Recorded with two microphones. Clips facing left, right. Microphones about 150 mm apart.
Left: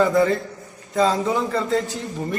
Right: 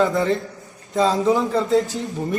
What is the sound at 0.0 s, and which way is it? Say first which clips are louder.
A man's voice: left 1 dB; centre (ahead or behind).